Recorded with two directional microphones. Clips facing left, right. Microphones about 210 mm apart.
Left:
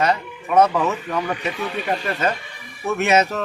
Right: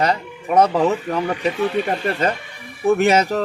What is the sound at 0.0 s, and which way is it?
Speech, 35° right (ahead or behind).